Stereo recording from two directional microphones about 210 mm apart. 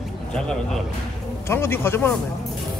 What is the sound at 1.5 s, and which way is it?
Speech, 10° left (ahead or behind).